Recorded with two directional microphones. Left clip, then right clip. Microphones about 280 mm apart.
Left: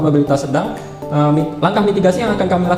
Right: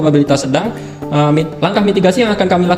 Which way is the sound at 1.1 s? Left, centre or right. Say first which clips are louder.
Right 2 dB; right.